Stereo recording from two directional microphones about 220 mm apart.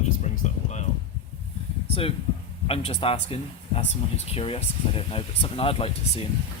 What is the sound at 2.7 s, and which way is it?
Speech, 25° left (ahead or behind).